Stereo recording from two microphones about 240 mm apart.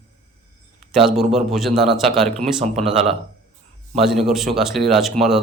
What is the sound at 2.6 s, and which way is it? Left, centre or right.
Speech, right.